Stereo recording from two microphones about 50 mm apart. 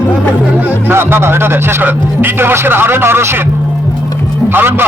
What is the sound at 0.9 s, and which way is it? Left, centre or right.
A man's voice, right.